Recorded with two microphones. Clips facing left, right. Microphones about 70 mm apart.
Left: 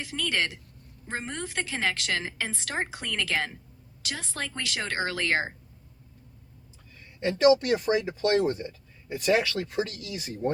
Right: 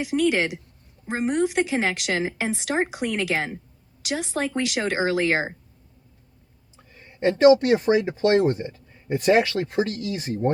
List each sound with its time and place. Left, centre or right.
0.0 s a woman's voice: centre
6.9 s speech: right